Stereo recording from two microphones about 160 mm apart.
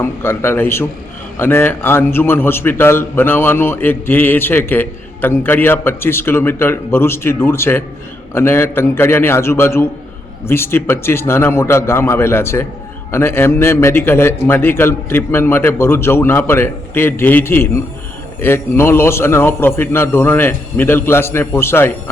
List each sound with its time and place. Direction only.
0.0 s a man's voice: 15° left (ahead or behind)